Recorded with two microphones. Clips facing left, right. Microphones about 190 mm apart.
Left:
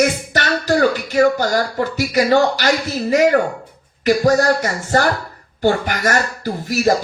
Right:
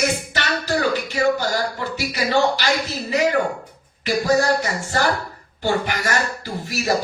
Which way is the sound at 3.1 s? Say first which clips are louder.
Left 5 dB; 45° left (ahead or behind).